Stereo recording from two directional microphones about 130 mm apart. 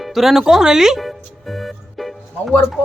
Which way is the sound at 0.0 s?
Centre (ahead or behind).